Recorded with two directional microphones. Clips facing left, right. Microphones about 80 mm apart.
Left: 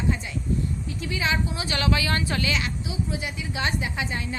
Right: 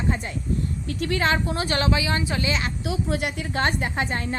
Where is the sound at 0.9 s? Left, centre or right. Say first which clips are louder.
Right 6 dB; right.